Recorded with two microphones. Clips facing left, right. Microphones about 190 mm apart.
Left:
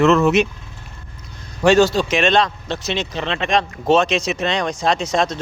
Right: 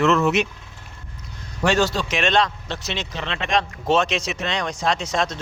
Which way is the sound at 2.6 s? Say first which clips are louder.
Left 6 dB; 20° left (ahead or behind).